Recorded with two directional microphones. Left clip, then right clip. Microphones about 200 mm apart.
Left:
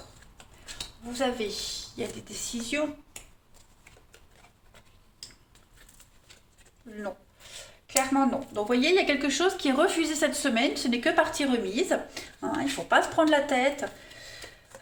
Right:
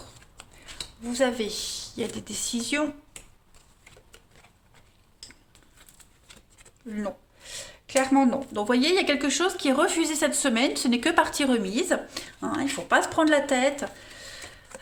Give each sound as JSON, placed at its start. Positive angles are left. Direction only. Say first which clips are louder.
{"t": 1.0, "sound": "speech", "louder": "right 4 dB", "side_deg": -55}
{"t": 7.9, "sound": "speech", "louder": "right 3 dB", "side_deg": -55}